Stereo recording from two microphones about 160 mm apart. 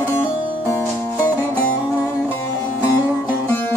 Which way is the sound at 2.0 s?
20° left (ahead or behind).